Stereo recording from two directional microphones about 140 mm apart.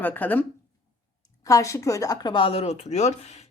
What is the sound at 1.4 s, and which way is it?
Speech, 25° left (ahead or behind).